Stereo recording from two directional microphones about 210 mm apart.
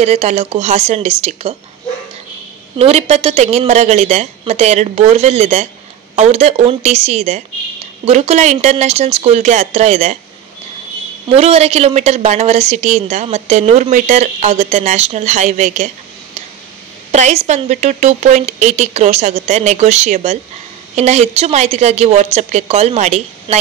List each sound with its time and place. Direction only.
0.0 s a woman's voice: 30° right (ahead or behind)
2.8 s a woman's voice: 30° right (ahead or behind)
11.3 s a woman's voice: 30° right (ahead or behind)
17.1 s a woman's voice: 30° right (ahead or behind)